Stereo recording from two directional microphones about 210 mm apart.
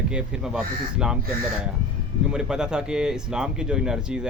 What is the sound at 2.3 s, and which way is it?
Speech, 5° right (ahead or behind).